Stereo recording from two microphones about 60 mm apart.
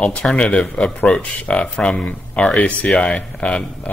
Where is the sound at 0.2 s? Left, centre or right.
Centre.